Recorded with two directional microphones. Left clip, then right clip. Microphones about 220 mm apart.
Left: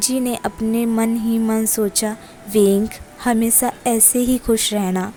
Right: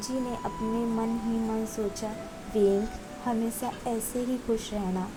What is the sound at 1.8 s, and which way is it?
A woman's voice, 45° left (ahead or behind).